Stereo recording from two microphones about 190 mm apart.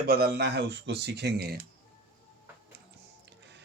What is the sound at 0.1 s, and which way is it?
Speech, 55° right (ahead or behind).